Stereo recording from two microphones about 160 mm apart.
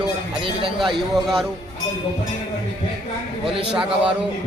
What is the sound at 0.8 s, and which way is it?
Speech, centre (ahead or behind).